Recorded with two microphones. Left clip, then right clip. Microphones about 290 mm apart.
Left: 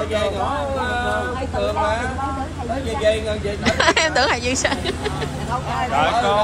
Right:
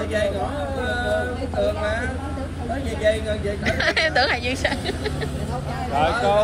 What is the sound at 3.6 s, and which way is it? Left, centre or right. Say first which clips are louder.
Speech: left 4 dB; centre.